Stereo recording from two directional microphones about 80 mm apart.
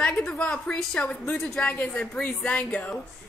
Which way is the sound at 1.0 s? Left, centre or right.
Centre.